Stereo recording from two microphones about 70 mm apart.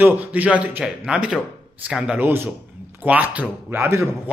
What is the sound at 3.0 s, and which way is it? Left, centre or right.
Speech, right.